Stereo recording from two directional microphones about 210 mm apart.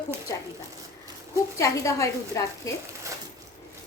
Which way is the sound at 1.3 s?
15° left (ahead or behind).